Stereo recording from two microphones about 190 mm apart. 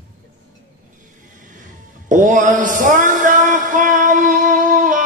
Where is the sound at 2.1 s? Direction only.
40° right (ahead or behind).